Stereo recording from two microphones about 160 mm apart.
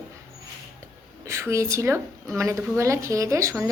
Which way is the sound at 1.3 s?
20° right (ahead or behind).